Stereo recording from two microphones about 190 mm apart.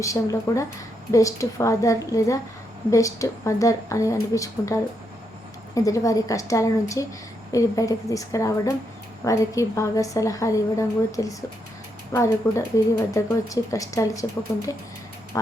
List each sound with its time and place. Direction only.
0.0 s a woman's voice: 15° left (ahead or behind)